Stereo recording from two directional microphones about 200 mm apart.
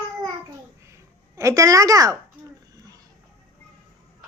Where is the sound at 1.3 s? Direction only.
15° right (ahead or behind).